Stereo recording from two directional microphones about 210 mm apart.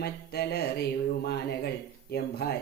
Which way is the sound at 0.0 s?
50° left (ahead or behind).